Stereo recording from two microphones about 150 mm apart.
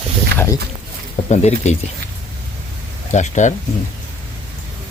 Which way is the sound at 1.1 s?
50° left (ahead or behind).